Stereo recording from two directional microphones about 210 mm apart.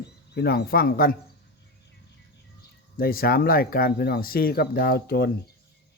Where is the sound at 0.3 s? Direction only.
50° left (ahead or behind).